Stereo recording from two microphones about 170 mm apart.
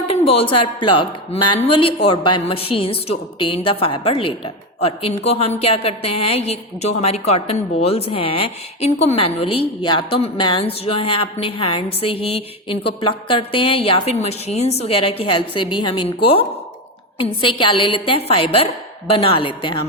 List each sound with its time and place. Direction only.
0.1 s a woman's voice: 35° left (ahead or behind)